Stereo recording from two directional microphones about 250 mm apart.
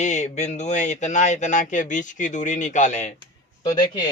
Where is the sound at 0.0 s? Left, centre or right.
Left.